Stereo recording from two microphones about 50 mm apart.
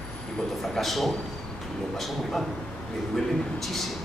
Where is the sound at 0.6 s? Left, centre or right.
Centre.